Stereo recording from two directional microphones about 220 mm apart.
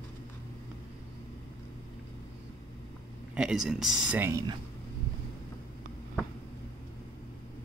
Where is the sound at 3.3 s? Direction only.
5° right (ahead or behind).